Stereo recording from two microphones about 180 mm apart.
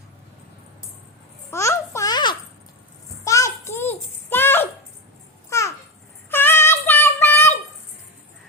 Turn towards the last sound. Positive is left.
turn(degrees=10)  # may be behind; listen again after turning